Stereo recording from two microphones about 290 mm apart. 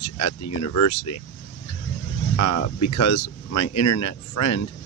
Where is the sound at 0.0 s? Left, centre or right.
Left.